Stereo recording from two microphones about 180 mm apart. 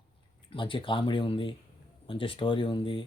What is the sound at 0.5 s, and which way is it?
Speech, 30° left (ahead or behind).